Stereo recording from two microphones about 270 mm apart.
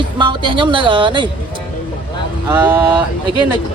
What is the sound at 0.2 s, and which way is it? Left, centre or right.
Speech, centre.